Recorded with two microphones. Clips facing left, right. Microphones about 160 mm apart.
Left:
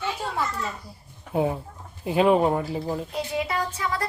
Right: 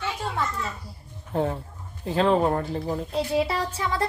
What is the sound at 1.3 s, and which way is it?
Speech, 10° left (ahead or behind).